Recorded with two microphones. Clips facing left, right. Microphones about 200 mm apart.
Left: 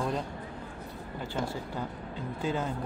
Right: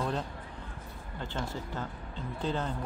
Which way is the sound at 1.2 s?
10° left (ahead or behind).